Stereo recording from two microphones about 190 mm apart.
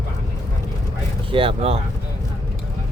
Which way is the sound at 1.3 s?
30° right (ahead or behind).